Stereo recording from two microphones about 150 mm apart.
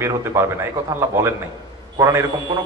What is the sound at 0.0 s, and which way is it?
Speech, 20° right (ahead or behind).